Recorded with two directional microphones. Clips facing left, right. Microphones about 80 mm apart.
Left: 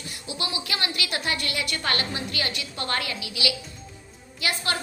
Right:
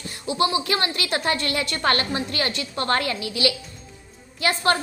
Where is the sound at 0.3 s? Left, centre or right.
Right.